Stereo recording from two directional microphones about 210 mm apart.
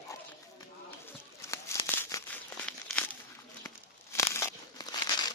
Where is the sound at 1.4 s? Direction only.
15° left (ahead or behind).